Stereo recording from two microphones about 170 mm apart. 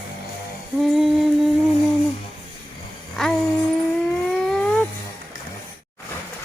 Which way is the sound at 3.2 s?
Centre (ahead or behind).